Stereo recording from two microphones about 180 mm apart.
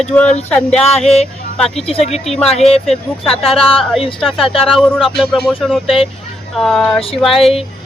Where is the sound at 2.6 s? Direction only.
35° left (ahead or behind).